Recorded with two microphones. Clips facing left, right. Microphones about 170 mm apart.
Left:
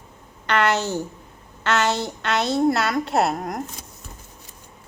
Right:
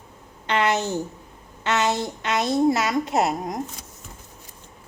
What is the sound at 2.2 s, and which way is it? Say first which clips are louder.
Speech: left 1 dB; 70° left (ahead or behind).